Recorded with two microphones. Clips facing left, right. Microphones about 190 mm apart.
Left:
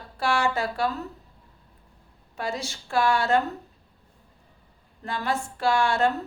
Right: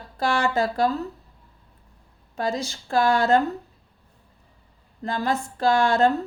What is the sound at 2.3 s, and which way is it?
A woman's voice, 40° right (ahead or behind).